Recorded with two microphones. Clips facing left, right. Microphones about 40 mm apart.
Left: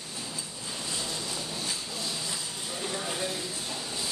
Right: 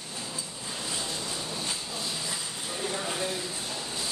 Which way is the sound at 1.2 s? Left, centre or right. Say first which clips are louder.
Right 1 dB; right.